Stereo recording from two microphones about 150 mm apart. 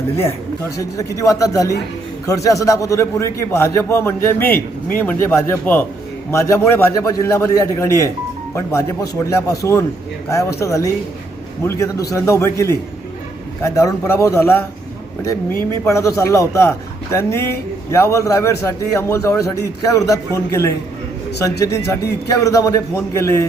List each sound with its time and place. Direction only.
0.8 s a man's voice: 20° left (ahead or behind)
15.5 s a man's voice: 15° left (ahead or behind)